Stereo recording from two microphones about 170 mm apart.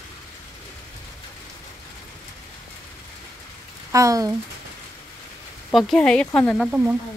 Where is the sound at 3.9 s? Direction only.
20° right (ahead or behind).